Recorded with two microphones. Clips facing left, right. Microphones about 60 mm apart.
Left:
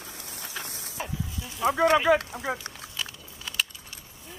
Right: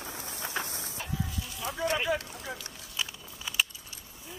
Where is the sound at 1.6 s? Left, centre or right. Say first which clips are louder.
Left 10 dB; left.